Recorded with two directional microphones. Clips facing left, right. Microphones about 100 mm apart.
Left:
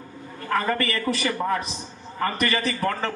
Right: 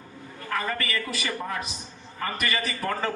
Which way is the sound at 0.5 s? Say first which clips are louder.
Left 5 dB; 35° left (ahead or behind).